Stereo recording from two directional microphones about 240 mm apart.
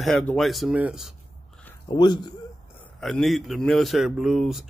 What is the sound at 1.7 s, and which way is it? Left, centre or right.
Speech, centre.